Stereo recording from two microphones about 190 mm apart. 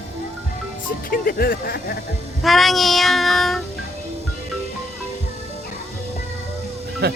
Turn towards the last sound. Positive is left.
turn(degrees=-55)  # may be behind; listen again after turning